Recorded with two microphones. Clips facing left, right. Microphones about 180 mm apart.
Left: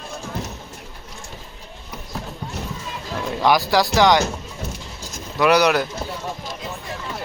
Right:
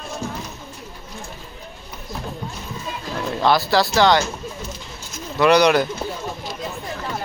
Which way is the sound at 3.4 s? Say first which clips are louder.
Even; 15° left (ahead or behind).